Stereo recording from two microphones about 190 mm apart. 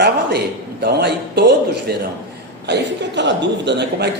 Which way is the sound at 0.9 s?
60° right (ahead or behind).